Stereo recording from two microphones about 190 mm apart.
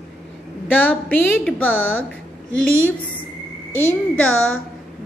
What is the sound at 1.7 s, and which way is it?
Speech, 90° left.